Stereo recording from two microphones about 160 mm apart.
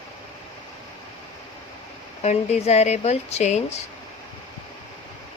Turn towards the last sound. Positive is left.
turn(degrees=45)  # may be behind; listen again after turning